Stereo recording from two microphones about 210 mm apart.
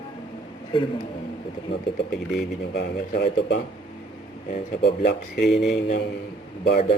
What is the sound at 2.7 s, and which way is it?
Speech, 50° left (ahead or behind).